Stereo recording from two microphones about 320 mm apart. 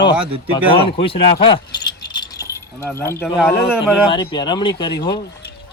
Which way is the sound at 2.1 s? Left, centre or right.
Centre.